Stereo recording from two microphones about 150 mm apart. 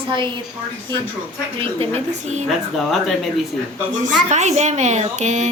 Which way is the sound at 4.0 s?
50° right (ahead or behind).